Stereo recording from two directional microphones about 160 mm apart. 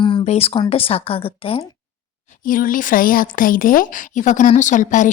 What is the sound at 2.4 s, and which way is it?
Speech, 60° left (ahead or behind).